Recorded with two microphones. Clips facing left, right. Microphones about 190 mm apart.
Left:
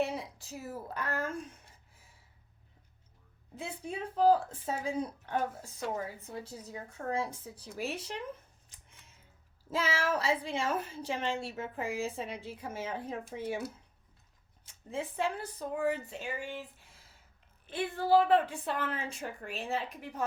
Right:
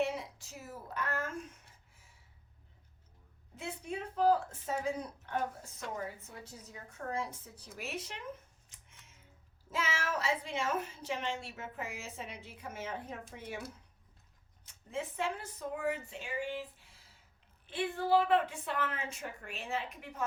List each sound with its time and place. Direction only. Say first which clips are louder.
0.0 s speech: left 1 dB; 35° left (ahead or behind)
3.5 s a woman's voice: left 1 dB; 35° left (ahead or behind)
8.7 s scissors: left 2 dB; 35° left (ahead or behind)
9.6 s a woman's voice: left 5 dB; 35° left (ahead or behind)
14.6 s a woman's voice: left 2 dB; 30° left (ahead or behind)
17.7 s a woman's voice: left 3 dB; 40° left (ahead or behind)